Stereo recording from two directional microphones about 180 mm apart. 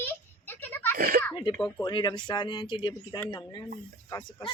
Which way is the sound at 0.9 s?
50° right (ahead or behind).